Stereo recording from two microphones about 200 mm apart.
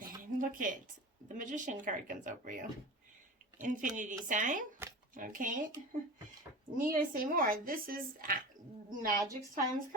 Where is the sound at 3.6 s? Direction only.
40° right (ahead or behind).